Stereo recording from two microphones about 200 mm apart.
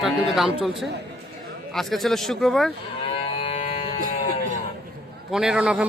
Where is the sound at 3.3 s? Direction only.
25° left (ahead or behind).